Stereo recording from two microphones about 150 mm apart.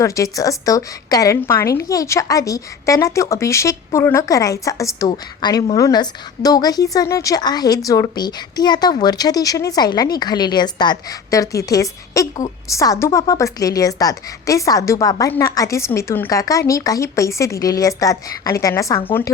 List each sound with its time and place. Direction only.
0.0 s a woman's voice: 20° left (ahead or behind)